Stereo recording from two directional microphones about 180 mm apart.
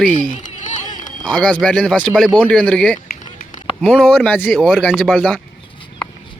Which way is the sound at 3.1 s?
50° left (ahead or behind).